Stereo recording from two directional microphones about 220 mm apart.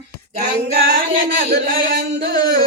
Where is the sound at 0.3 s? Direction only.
45° right (ahead or behind).